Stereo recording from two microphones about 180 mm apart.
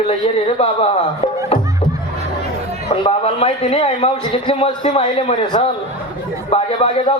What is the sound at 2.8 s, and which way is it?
Speech, 30° left (ahead or behind).